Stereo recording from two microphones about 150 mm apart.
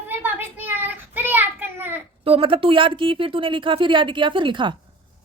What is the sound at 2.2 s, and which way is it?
Speech, 40° right (ahead or behind).